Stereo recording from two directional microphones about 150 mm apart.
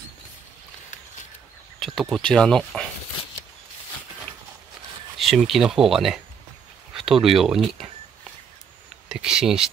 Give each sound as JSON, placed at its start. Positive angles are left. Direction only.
{"t": 1.8, "sound": "speech", "side_deg": 0}
{"t": 5.2, "sound": "speech", "side_deg": 0}
{"t": 9.1, "sound": "speech", "side_deg": -5}